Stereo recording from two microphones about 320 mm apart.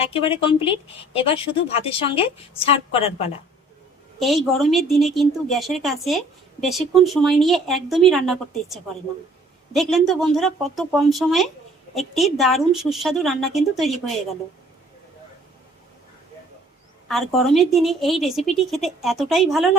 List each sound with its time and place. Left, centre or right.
0.0 s speech: centre
4.2 s speech: centre
17.1 s speech: centre